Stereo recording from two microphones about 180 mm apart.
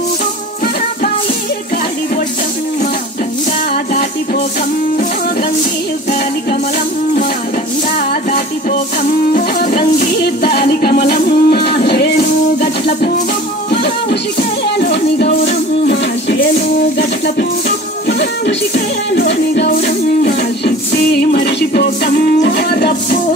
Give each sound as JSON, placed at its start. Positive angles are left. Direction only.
{"t": 3.7, "sound": "music", "side_deg": 50}
{"t": 8.1, "sound": "music", "side_deg": 45}
{"t": 14.8, "sound": "music", "side_deg": 60}